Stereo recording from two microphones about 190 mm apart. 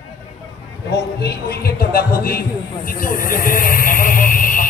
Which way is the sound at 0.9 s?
60° left (ahead or behind).